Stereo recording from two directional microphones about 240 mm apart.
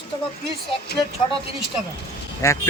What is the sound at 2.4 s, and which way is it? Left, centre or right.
Speech, centre.